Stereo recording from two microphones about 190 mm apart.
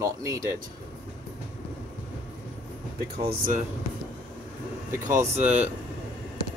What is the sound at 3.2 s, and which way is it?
Speech, 45° right (ahead or behind).